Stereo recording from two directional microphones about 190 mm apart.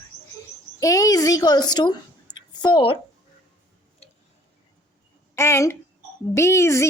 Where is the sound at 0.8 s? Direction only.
15° left (ahead or behind).